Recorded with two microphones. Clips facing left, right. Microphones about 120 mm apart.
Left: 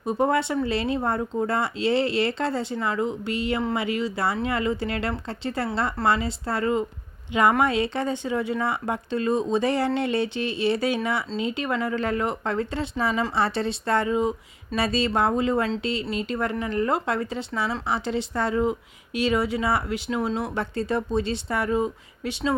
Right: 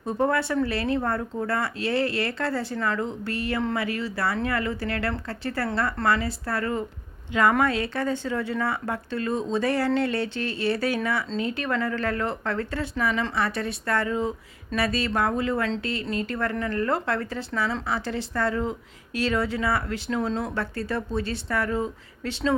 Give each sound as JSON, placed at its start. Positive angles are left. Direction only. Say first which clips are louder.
{"t": 0.0, "sound": "speech", "louder": "left 2 dB", "side_deg": 15}
{"t": 20.6, "sound": "speech", "louder": "left 3 dB", "side_deg": 20}